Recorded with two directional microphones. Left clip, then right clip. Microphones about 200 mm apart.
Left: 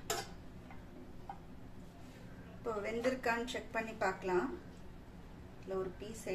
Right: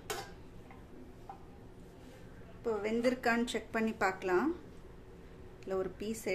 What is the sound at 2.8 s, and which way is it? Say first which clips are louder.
A woman's voice: right 4 dB; 45° right (ahead or behind).